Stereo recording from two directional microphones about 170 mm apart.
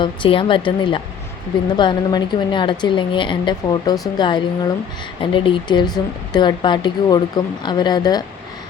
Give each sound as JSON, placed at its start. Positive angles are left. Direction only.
{"t": 0.0, "sound": "speech", "side_deg": 30}